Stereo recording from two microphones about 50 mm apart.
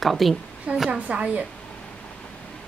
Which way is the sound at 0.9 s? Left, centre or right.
Right.